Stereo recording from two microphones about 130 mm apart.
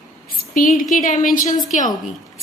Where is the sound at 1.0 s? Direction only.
80° left.